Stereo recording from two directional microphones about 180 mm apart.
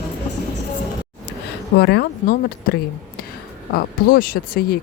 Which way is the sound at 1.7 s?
65° left (ahead or behind).